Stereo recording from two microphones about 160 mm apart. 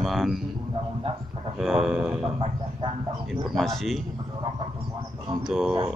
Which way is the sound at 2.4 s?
35° right (ahead or behind).